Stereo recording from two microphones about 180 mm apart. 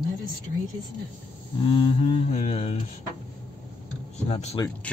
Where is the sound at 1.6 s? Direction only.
25° left (ahead or behind).